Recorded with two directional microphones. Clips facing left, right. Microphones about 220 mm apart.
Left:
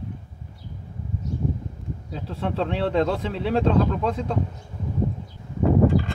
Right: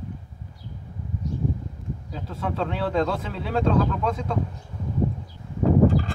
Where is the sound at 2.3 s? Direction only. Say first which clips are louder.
Left 2 dB; 30° left (ahead or behind).